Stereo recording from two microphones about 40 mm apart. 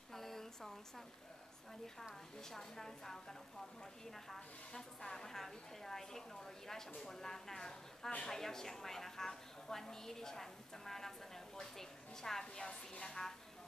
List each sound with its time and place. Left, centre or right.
0.1 s a sound: centre
2.5 s a woman's voice: centre
12.6 s a woman's voice: left